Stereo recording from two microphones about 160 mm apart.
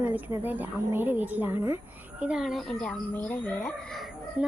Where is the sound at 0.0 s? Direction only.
10° right (ahead or behind); by 3.8 s 10° left (ahead or behind).